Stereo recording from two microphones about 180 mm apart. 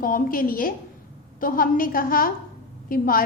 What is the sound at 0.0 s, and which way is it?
A woman's voice, 50° left (ahead or behind).